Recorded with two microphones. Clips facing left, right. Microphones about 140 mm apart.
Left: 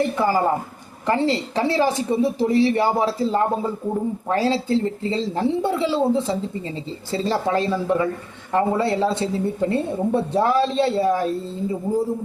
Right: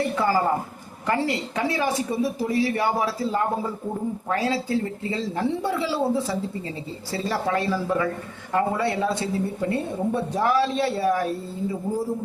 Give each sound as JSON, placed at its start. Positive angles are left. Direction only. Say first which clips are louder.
{"t": 0.2, "sound": "speech", "louder": "left 2 dB", "side_deg": 20}